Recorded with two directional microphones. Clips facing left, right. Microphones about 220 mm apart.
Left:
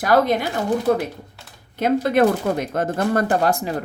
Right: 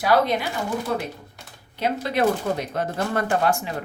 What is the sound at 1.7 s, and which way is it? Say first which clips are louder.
Speech: left 6 dB; 50° left (ahead or behind).